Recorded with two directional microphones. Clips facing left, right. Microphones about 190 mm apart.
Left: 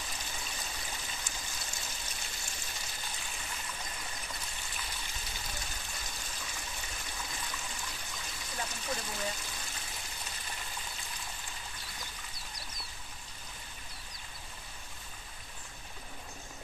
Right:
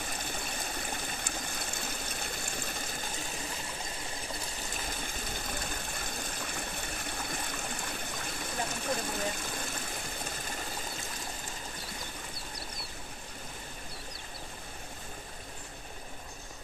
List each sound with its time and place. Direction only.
0.0 s stream: 55° right (ahead or behind)
4.7 s water: 50° right (ahead or behind)